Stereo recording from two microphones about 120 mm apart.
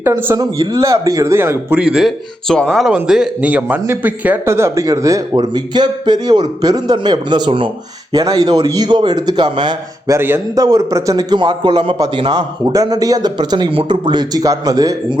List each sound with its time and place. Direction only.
0.0 s speech: 20° right (ahead or behind)
0.3 s speech: 35° right (ahead or behind)
1.8 s a man's voice: 5° right (ahead or behind); by 7.7 s 40° right (ahead or behind)
8.1 s a man's voice: 30° right (ahead or behind)
10.1 s speech: 20° right (ahead or behind)
10.5 s a man's voice: 30° right (ahead or behind)